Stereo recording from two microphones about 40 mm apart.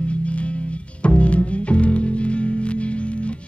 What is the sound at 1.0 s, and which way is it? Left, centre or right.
Music, left.